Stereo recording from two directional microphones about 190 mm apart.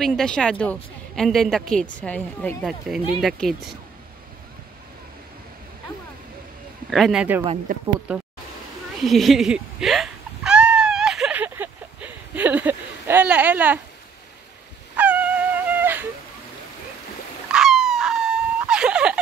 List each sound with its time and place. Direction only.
0.0 s a woman's voice: 5° left (ahead or behind)
6.9 s a woman's voice: centre (ahead or behind)
7.7 s speech: 45° right (ahead or behind)
8.1 s speech: 5° right (ahead or behind)
9.0 s a sound: centre (ahead or behind)
15.0 s dog: 10° right (ahead or behind)
17.5 s a sound: centre (ahead or behind)